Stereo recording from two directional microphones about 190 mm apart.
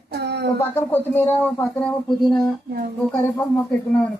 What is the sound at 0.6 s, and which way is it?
Speech, 10° left (ahead or behind).